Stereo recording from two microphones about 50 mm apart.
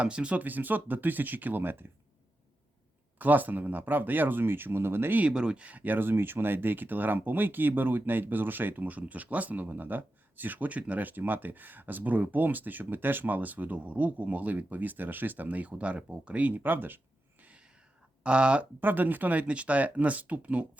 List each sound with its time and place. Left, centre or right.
0.0 s speech: right
0.3 s speech: right
3.2 s speech: right
5.3 s speech: centre; by 17.0 s right
18.2 s speech: right
18.8 s speech: right